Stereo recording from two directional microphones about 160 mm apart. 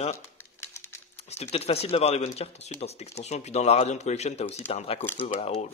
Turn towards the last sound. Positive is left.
turn(degrees=40)  # may be behind; listen again after turning